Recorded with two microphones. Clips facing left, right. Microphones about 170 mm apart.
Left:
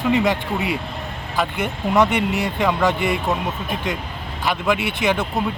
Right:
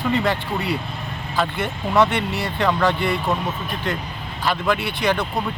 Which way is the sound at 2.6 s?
5° left (ahead or behind).